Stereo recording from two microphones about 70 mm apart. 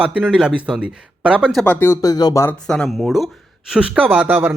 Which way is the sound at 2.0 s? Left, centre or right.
Left.